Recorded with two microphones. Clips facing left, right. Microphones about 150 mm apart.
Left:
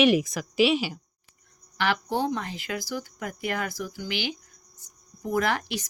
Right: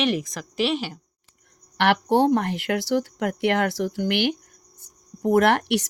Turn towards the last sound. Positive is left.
turn(degrees=-70)  # may be behind; listen again after turning